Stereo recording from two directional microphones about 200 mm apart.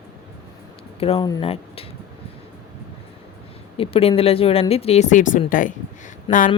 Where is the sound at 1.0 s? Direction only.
25° left (ahead or behind).